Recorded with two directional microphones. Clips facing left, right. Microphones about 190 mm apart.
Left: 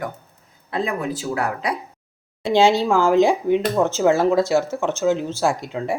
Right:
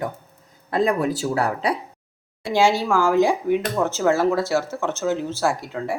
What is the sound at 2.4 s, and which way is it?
Speech, 20° left (ahead or behind).